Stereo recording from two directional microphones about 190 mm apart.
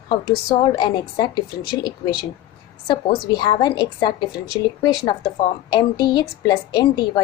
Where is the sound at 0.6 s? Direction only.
25° left (ahead or behind).